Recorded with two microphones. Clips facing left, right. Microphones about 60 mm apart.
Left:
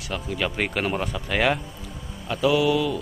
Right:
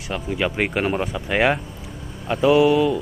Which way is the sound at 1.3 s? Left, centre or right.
Centre.